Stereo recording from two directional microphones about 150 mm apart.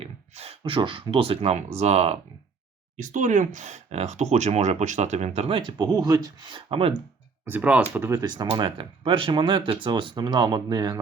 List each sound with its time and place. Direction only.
0.0 s speech: 40° right (ahead or behind)
3.0 s speech: 55° right (ahead or behind); by 6.9 s 40° right (ahead or behind)
7.4 s speech: 10° right (ahead or behind)
8.2 s speech: 25° right (ahead or behind)